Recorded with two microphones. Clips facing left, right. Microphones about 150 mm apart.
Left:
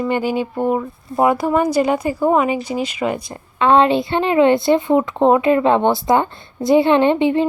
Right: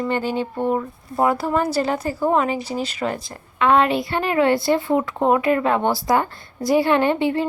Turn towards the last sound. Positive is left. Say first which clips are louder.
# left 4 dB
turn(degrees=20)  # may be behind; listen again after turning